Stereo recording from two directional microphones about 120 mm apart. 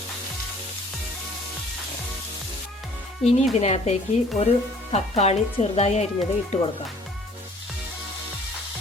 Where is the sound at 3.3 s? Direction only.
65° left (ahead or behind).